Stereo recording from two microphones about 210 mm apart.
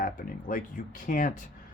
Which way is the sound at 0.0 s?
40° left (ahead or behind).